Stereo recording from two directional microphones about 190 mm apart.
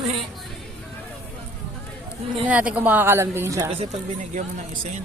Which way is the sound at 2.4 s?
5° right (ahead or behind).